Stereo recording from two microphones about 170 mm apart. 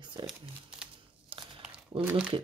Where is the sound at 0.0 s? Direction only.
25° right (ahead or behind).